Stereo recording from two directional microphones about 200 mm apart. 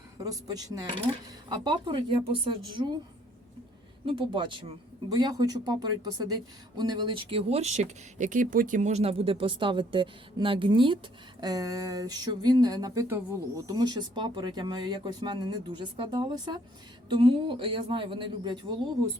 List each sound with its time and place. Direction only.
0.2 s speech: 20° right (ahead or behind)
4.0 s speech: 25° right (ahead or behind)